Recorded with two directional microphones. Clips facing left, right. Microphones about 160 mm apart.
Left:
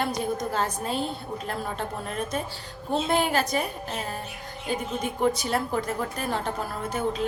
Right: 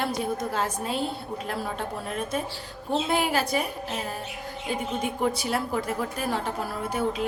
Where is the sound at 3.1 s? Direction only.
5° right (ahead or behind).